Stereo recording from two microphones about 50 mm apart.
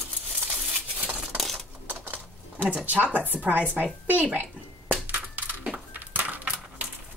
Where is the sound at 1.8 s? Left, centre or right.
Right.